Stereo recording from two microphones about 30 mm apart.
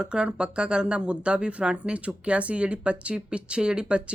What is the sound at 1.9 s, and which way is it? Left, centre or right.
A woman's voice, right.